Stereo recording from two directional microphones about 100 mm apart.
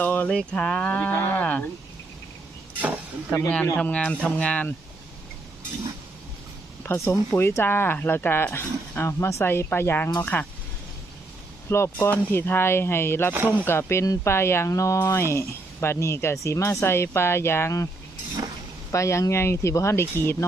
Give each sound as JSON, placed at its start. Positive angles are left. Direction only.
{"t": 0.0, "sound": "a sound", "side_deg": 20}
{"t": 0.3, "sound": "moo", "side_deg": 10}
{"t": 2.8, "sound": "speech", "side_deg": -15}
{"t": 3.8, "sound": "moo", "side_deg": 10}
{"t": 6.8, "sound": "speech", "side_deg": 25}
{"t": 11.7, "sound": "speech", "side_deg": 25}
{"t": 13.3, "sound": "speech", "side_deg": -20}
{"t": 13.7, "sound": "speech", "side_deg": 25}
{"t": 18.9, "sound": "speech", "side_deg": 30}